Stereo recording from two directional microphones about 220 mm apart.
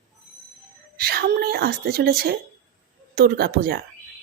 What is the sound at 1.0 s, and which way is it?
Speech, 45° right (ahead or behind).